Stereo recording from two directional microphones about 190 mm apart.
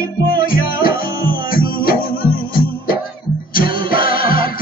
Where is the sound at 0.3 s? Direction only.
50° left (ahead or behind).